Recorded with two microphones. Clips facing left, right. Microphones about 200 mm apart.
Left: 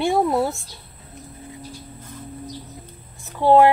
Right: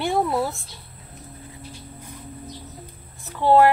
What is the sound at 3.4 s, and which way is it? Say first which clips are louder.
Speech: left 2 dB; 15° left (ahead or behind).